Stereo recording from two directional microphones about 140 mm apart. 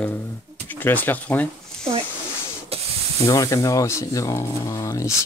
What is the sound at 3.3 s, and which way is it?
Speech, 25° left (ahead or behind).